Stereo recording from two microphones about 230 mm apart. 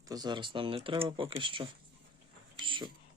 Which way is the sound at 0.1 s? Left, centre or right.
Centre.